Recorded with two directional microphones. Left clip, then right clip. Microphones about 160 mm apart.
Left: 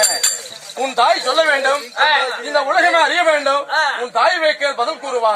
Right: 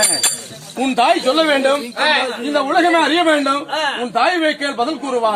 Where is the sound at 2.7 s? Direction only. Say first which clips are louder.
Even; 15° left (ahead or behind).